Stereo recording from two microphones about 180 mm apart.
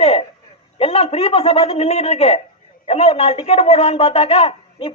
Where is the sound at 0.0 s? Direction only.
35° left (ahead or behind).